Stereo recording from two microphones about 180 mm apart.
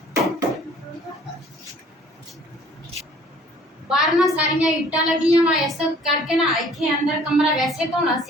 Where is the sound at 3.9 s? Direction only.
Centre (ahead or behind).